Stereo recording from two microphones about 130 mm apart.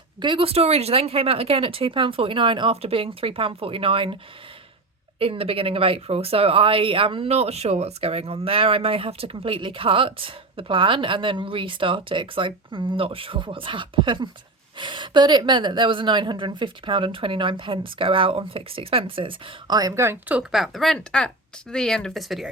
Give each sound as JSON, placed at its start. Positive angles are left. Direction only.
{"t": 0.2, "sound": "speech", "side_deg": -40}
{"t": 5.2, "sound": "a woman's voice", "side_deg": -45}